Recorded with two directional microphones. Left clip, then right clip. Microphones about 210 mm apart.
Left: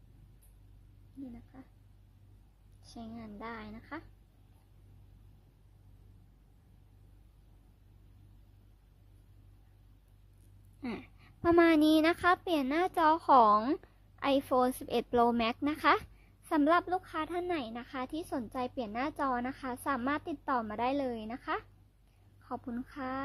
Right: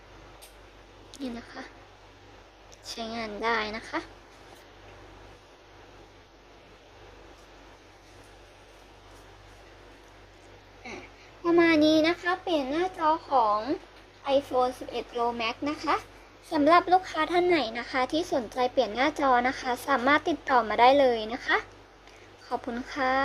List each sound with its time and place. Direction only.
3.0 s a woman's voice: centre (ahead or behind)
11.4 s a woman's voice: 30° left (ahead or behind)
16.5 s a woman's voice: 25° left (ahead or behind)